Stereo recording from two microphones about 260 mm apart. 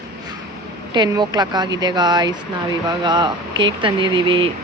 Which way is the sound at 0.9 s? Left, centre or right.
Centre.